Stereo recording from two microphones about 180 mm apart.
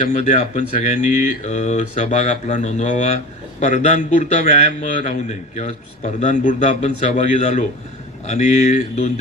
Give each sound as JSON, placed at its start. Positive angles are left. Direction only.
{"t": 0.0, "sound": "a man's voice", "side_deg": 40}